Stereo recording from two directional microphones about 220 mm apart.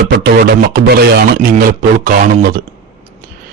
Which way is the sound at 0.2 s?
45° right (ahead or behind).